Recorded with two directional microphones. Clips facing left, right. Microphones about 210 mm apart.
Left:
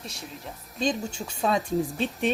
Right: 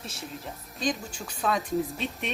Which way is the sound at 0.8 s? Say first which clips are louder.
Left 3 dB; 25° left (ahead or behind).